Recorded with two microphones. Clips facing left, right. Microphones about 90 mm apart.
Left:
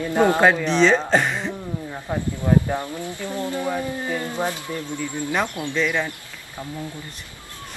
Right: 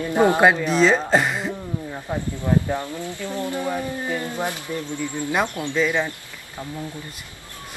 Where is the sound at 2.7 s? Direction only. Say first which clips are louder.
Even; 15° left (ahead or behind).